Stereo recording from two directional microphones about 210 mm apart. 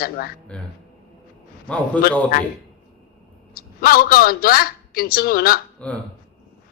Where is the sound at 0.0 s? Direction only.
45° left (ahead or behind).